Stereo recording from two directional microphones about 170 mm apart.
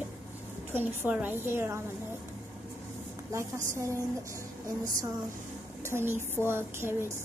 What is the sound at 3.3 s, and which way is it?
Speech, 15° right (ahead or behind).